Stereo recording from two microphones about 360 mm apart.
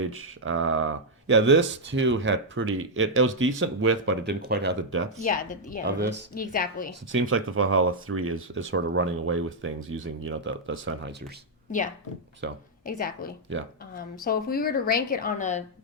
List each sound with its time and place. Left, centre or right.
0.0 s speech: right
5.2 s a woman's voice: left
7.1 s speech: right
12.4 s speech: right
12.8 s a woman's voice: left